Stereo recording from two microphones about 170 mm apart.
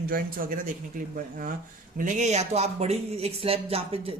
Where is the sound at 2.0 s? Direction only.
45° right (ahead or behind).